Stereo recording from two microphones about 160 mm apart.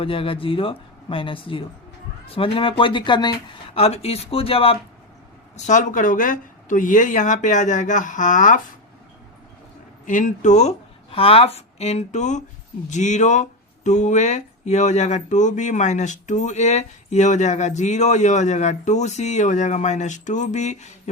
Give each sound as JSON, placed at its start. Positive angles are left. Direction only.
{"t": 0.0, "sound": "speech", "side_deg": 35}
{"t": 3.8, "sound": "speech", "side_deg": 40}
{"t": 5.5, "sound": "speech", "side_deg": 45}
{"t": 10.1, "sound": "speech", "side_deg": 55}